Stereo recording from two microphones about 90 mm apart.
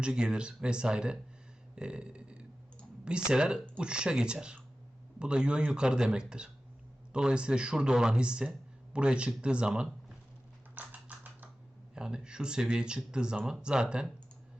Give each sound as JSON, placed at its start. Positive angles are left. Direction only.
{"t": 0.0, "sound": "speech", "side_deg": -10}
{"t": 1.7, "sound": "a sound", "side_deg": -10}
{"t": 3.0, "sound": "speech", "side_deg": -10}
{"t": 10.8, "sound": "typing", "side_deg": -20}
{"t": 11.9, "sound": "speech", "side_deg": -10}